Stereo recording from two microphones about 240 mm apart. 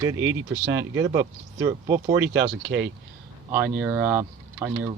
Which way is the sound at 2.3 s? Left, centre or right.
Right.